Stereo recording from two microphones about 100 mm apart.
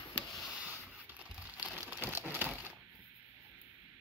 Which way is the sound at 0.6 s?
15° right (ahead or behind).